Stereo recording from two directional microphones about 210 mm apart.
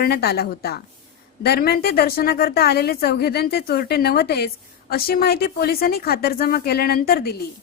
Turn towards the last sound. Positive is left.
turn(degrees=45)  # may be behind; listen again after turning